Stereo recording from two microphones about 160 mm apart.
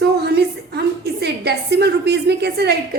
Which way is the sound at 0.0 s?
90° right.